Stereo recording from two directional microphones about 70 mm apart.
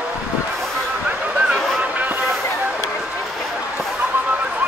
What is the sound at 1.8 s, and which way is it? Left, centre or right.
Music, right.